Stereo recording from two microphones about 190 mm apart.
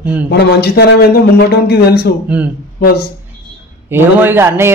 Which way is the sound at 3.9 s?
10° right (ahead or behind).